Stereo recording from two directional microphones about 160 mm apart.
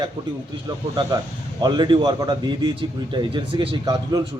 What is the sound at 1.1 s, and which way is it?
A man's voice, 25° right (ahead or behind).